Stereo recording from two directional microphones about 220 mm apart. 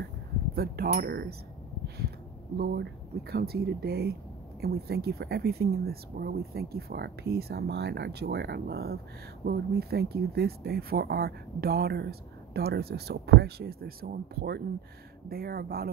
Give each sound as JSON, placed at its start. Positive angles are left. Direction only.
{"t": 0.8, "sound": "speech", "side_deg": -40}